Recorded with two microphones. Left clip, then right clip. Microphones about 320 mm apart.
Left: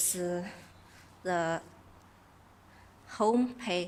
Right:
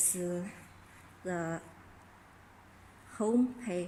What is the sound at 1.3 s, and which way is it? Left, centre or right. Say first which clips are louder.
Speech: left 6 dB; left.